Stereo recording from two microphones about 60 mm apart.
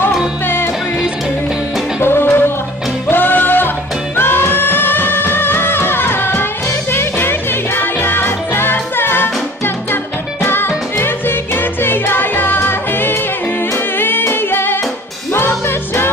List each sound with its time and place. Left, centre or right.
0.0 s music: left
2.0 s music: left
10.4 s music: left